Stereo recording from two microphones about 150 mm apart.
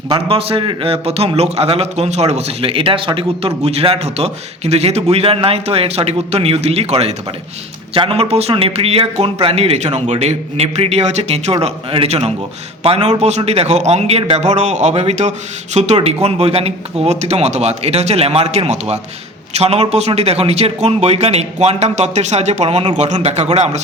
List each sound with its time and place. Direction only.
0.1 s a man's voice: 40° right (ahead or behind)